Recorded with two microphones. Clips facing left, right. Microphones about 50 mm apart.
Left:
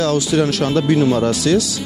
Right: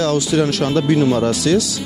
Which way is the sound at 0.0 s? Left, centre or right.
Left.